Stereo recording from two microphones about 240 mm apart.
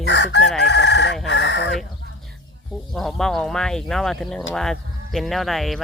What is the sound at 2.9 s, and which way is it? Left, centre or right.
Speech, centre.